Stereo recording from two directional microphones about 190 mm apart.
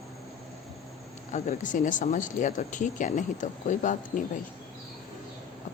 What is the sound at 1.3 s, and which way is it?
Speech, 40° left (ahead or behind).